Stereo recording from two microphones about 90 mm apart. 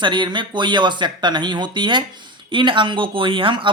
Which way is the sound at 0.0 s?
60° right (ahead or behind).